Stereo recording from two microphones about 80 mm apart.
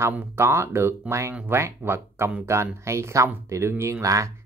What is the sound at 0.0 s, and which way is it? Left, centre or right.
Speech, right.